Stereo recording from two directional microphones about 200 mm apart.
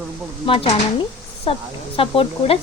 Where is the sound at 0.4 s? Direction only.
25° left (ahead or behind).